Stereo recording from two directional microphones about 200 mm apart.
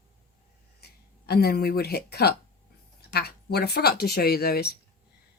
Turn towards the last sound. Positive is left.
turn(degrees=50)  # may be behind; listen again after turning